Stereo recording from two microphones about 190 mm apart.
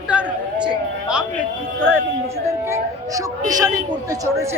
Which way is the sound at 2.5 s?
15° right (ahead or behind).